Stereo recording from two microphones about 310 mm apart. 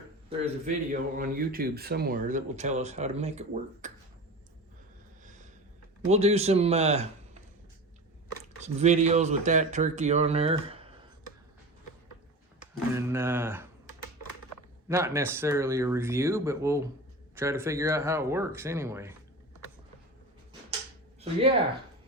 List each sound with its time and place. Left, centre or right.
0.3 s speech: right
5.2 s a sound: right
6.1 s speech: right
8.6 s speech: right
12.9 s speech: centre
14.8 s speech: centre